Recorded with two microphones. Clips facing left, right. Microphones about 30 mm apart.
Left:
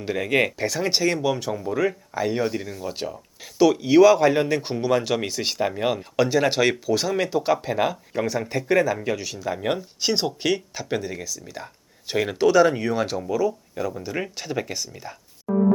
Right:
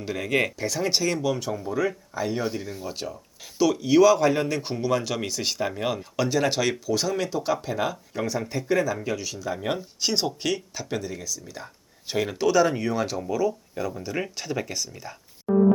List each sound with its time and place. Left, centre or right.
0.0 s speech: centre